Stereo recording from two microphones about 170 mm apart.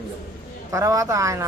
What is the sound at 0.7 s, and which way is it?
Speech, 20° right (ahead or behind).